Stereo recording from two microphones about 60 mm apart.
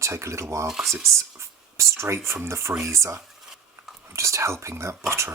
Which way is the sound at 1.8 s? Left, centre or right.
Right.